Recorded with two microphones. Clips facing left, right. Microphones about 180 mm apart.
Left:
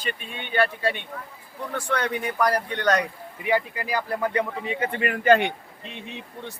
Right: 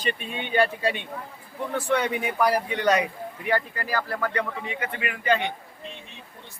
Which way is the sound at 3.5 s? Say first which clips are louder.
Left 2 dB; 15° left (ahead or behind).